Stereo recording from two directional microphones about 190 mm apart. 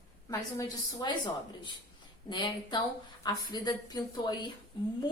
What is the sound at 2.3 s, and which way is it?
Speech, 25° left (ahead or behind).